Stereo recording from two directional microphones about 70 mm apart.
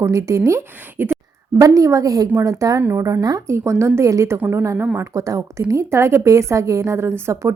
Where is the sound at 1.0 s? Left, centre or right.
Right.